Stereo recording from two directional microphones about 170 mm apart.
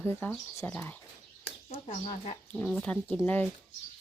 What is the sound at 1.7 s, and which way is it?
Speech, 40° left (ahead or behind).